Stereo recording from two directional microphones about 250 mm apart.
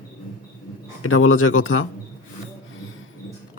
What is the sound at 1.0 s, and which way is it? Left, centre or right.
Speech, left.